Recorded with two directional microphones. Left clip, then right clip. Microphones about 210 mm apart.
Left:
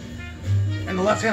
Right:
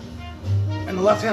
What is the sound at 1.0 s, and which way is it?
Speech, centre (ahead or behind).